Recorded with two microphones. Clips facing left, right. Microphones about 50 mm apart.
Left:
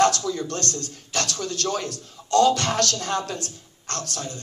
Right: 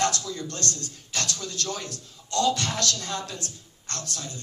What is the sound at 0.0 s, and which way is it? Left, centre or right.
A man's voice, left.